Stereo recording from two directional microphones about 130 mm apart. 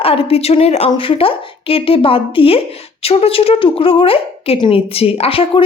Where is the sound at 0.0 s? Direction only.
45° left (ahead or behind).